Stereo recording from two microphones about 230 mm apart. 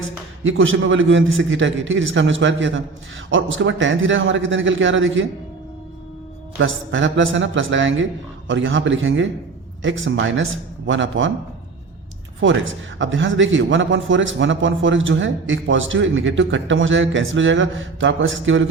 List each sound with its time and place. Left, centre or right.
0.4 s a man's voice: right
6.6 s a man's voice: right
13.0 s a man's voice: right